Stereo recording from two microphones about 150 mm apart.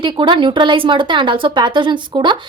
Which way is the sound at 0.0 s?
30° right (ahead or behind).